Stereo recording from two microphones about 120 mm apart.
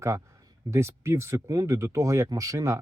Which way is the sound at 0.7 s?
20° right (ahead or behind).